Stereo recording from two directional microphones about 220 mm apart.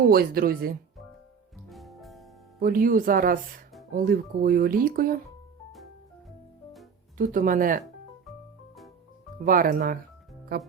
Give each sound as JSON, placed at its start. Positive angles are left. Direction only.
{"t": 0.0, "sound": "speech", "side_deg": -40}
{"t": 1.7, "sound": "music", "side_deg": 0}
{"t": 2.6, "sound": "speech", "side_deg": -40}
{"t": 7.2, "sound": "speech", "side_deg": -40}
{"t": 9.4, "sound": "speech", "side_deg": -40}